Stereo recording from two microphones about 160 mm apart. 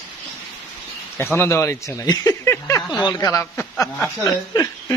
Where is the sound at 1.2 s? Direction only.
15° left (ahead or behind).